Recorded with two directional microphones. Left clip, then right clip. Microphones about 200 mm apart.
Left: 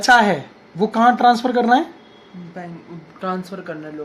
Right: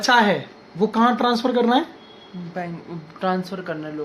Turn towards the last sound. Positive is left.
turn(degrees=-20)  # may be behind; listen again after turning